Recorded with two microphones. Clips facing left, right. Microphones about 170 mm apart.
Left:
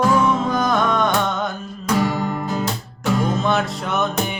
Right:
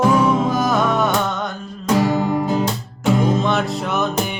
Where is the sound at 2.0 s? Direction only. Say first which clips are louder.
Right 4 dB; 15° right (ahead or behind).